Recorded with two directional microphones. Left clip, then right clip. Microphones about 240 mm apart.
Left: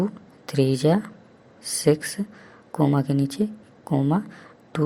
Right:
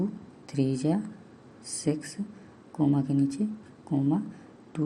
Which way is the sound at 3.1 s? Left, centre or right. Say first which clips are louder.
Left 3 dB; left.